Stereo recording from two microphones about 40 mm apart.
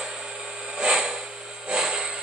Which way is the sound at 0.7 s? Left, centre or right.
Centre.